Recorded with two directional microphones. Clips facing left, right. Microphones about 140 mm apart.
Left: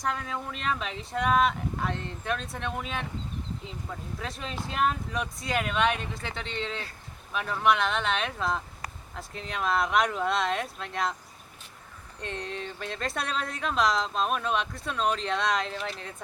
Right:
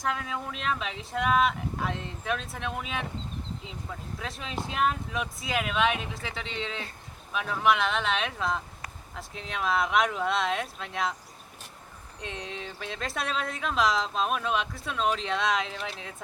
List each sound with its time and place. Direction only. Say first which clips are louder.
0.0 s speech: even; centre (ahead or behind)
12.2 s speech: left 2 dB; centre (ahead or behind)